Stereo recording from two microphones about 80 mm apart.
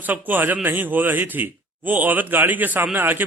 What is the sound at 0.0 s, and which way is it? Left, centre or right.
Speech, right.